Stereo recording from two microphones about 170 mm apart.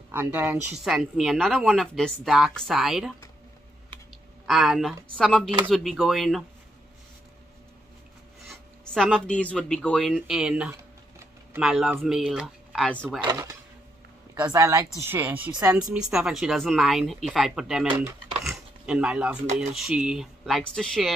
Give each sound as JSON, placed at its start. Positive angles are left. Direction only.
{"t": 0.1, "sound": "speech", "side_deg": -10}
{"t": 4.5, "sound": "speech", "side_deg": 0}
{"t": 8.5, "sound": "speech", "side_deg": 5}
{"t": 13.2, "sound": "a woman's voice", "side_deg": -25}